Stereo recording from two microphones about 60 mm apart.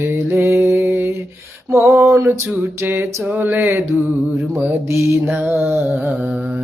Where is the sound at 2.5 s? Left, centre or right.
Right.